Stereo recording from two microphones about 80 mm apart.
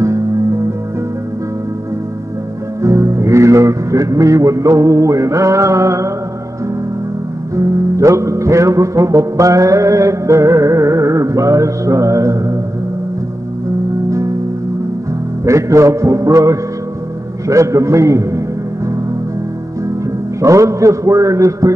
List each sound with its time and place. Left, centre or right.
2.8 s speech: right
7.5 s music: right
15.4 s music: right
20.3 s music: right